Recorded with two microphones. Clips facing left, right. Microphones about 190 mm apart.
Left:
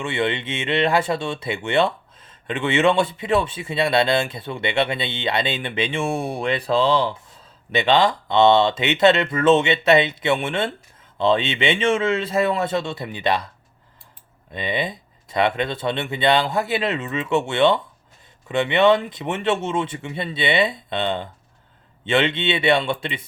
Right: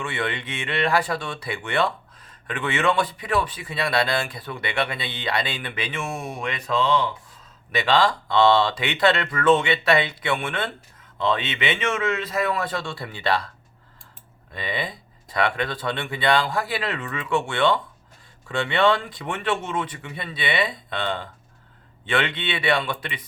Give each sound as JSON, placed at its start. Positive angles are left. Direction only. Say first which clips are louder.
{"t": 0.0, "sound": "speech", "louder": "left 5 dB", "side_deg": 25}
{"t": 14.5, "sound": "speech", "louder": "left 4 dB", "side_deg": 20}